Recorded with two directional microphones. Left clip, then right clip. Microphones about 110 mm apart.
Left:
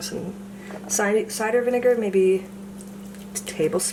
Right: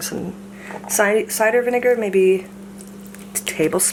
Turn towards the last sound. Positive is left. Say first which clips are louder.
# right 4 dB
turn(degrees=-25)  # may be behind; listen again after turning